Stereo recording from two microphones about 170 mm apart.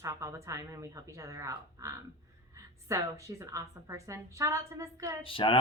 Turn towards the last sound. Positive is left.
turn(degrees=30)  # may be behind; listen again after turning